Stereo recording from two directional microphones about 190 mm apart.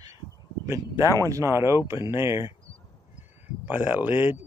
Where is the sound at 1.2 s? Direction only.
15° right (ahead or behind).